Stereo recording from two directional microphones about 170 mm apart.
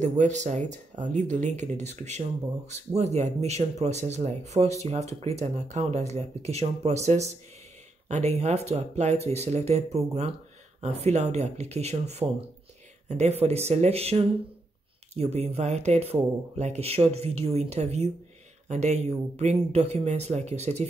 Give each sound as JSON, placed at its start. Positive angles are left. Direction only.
{"t": 0.2, "sound": "speech", "side_deg": -45}